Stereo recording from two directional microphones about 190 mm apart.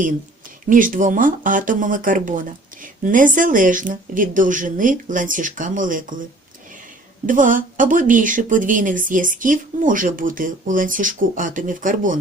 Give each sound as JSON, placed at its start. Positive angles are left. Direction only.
{"t": 0.7, "sound": "speech", "side_deg": -45}
{"t": 7.3, "sound": "speech", "side_deg": -45}